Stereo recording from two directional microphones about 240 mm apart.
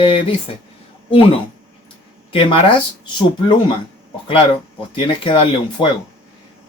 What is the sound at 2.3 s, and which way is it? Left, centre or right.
Speech, left.